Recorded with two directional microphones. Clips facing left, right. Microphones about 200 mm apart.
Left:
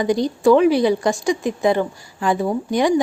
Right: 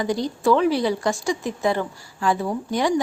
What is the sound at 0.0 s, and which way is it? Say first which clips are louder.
A woman's voice: left 5 dB; 15° left (ahead or behind).